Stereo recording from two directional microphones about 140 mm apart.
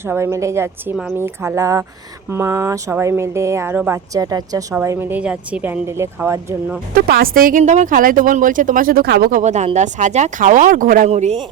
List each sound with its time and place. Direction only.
0.0 s a woman's voice: 20° right (ahead or behind)
6.9 s speech: 90° right
7.6 s speech: 60° right (ahead or behind); by 11.1 s 75° right (ahead or behind)
11.1 s a man's voice: 55° right (ahead or behind)